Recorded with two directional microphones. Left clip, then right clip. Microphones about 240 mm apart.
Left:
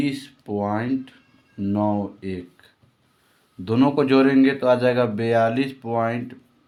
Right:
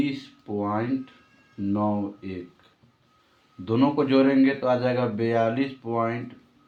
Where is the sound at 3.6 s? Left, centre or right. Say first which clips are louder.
Left 3 dB; left.